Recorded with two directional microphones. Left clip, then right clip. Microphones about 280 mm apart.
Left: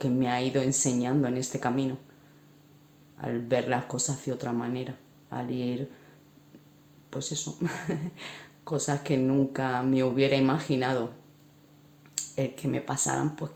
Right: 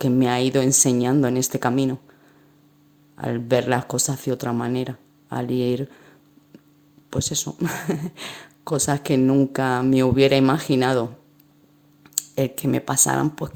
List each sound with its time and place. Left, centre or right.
0.0 s speech: right
3.2 s speech: right
7.1 s speech: right
12.1 s speech: right